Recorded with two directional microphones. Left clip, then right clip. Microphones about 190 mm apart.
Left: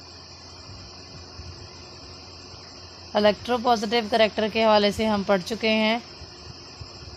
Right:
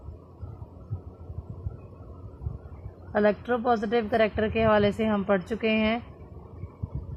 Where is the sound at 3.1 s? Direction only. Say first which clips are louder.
Left 3 dB; 25° left (ahead or behind).